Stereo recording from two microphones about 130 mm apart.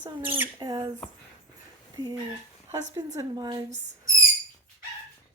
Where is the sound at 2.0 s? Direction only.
30° right (ahead or behind).